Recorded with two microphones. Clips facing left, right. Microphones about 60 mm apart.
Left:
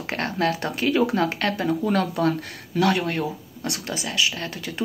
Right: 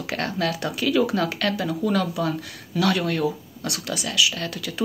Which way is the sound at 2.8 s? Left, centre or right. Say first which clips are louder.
Right 1 dB; left.